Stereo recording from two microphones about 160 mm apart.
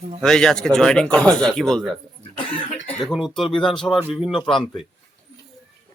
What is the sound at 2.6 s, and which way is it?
Speech, 45° left (ahead or behind).